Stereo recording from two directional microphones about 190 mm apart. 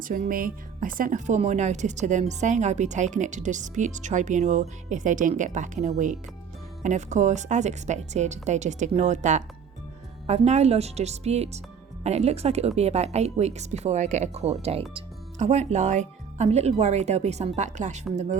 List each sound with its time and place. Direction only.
0.0 s a woman's voice: 45° right (ahead or behind)